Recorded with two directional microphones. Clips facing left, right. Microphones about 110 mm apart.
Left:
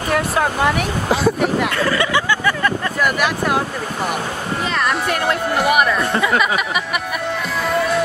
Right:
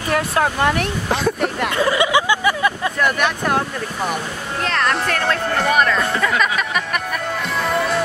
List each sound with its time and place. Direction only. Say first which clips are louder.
0.1 s speech: even; centre (ahead or behind)
1.8 s a sound: right 2 dB; 15° right (ahead or behind)
3.0 s speech: even; 5° left (ahead or behind)
4.6 s speech: right 1 dB; 5° left (ahead or behind)
7.6 s music: left 2 dB; centre (ahead or behind)